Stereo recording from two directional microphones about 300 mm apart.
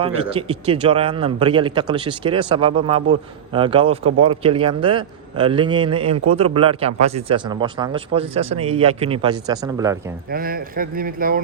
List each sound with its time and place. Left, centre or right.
0.0 s a man's voice: centre
10.3 s a man's voice: right